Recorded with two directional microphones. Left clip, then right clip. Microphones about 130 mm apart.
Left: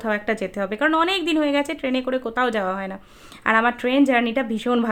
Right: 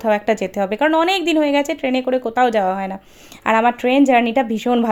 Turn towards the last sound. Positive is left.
turn(degrees=-25)  # may be behind; listen again after turning